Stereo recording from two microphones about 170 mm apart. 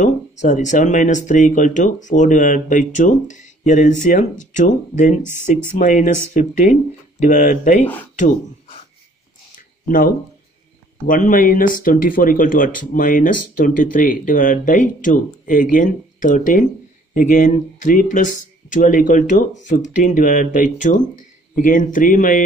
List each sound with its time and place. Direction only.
0.0 s speech: 45° left (ahead or behind)
7.8 s speech: 10° left (ahead or behind)
9.6 s a sound: 55° left (ahead or behind)
11.1 s speech: 55° left (ahead or behind)